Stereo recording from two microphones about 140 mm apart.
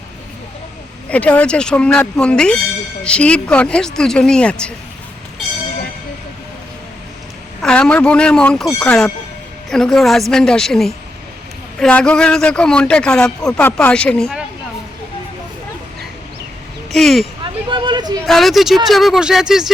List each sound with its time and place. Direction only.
1.1 s speech: 10° left (ahead or behind)
7.6 s a woman's voice: 5° left (ahead or behind)
16.9 s a woman's voice: centre (ahead or behind)
17.4 s a sound: 35° right (ahead or behind)
18.3 s a woman's voice: centre (ahead or behind)